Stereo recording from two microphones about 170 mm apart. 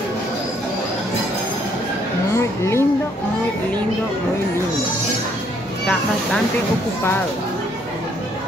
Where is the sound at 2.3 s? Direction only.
15° left (ahead or behind).